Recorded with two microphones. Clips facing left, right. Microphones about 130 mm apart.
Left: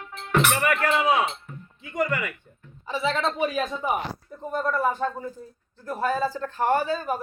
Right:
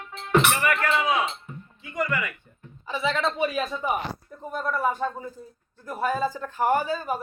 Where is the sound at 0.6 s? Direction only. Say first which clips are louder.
Left 2 dB; 35° left (ahead or behind).